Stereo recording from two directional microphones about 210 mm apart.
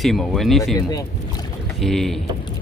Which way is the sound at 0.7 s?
20° left (ahead or behind).